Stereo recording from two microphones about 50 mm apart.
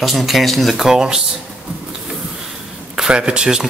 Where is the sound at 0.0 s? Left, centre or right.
Centre.